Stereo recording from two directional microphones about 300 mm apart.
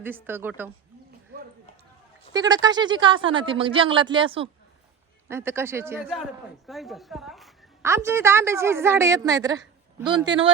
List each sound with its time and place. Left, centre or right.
0.0 s a woman's voice: centre
1.3 s a sound: right
2.3 s a woman's voice: centre